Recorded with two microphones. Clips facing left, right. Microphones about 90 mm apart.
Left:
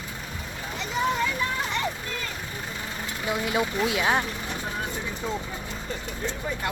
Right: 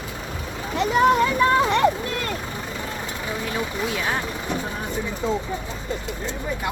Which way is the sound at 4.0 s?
15° left (ahead or behind).